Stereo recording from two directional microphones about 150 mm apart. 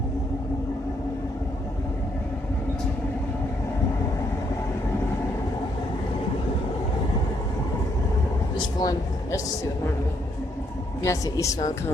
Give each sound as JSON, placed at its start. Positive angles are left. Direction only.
{"t": 8.5, "sound": "vehicle", "side_deg": 25}
{"t": 11.0, "sound": "a woman's voice", "side_deg": 20}